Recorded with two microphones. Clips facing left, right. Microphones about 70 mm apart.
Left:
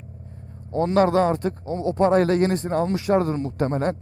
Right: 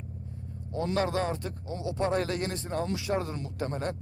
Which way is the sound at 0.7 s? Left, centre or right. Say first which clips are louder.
Left 10 dB; left.